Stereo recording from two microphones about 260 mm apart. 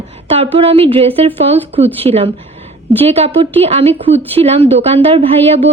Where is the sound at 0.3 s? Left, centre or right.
Right.